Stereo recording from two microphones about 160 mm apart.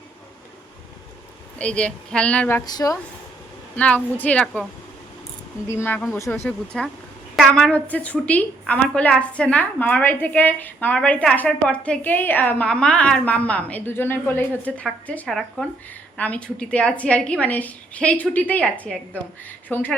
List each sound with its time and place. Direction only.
1.5 s a woman's voice: 5° left (ahead or behind); by 3.0 s 25° left (ahead or behind)
3.8 s a woman's voice: 10° left (ahead or behind)
5.6 s a woman's voice: 15° left (ahead or behind)
6.4 s a woman's voice: 5° left (ahead or behind)